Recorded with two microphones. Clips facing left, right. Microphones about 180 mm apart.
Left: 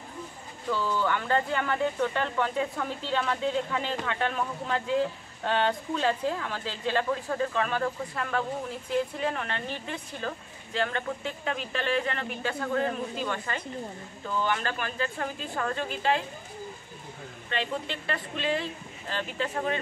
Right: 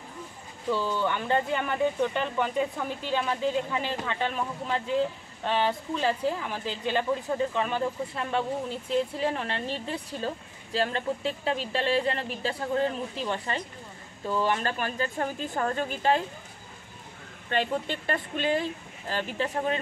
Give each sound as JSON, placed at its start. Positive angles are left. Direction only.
{"t": 0.7, "sound": "speech", "side_deg": -25}
{"t": 5.4, "sound": "speech", "side_deg": -5}
{"t": 14.2, "sound": "a woman's voice", "side_deg": -30}
{"t": 17.5, "sound": "speech", "side_deg": -45}